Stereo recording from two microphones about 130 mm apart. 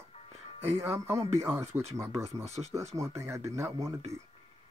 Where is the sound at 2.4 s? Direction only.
55° right (ahead or behind).